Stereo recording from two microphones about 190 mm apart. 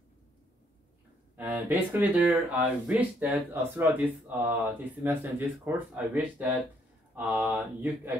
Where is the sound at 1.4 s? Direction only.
10° right (ahead or behind).